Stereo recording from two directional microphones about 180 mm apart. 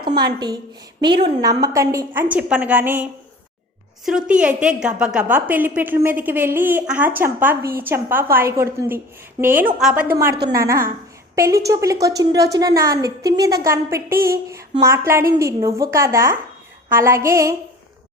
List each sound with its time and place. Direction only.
0.0 s a woman's voice: 25° right (ahead or behind)